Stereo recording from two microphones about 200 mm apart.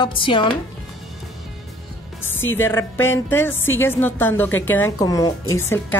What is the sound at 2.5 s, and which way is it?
A woman's voice, 10° left (ahead or behind).